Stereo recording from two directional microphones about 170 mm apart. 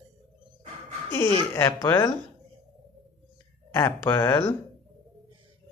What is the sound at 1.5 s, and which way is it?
Speech, 20° left (ahead or behind).